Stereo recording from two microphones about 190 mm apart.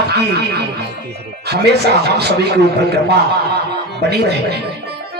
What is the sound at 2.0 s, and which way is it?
A man's voice, 60° right (ahead or behind).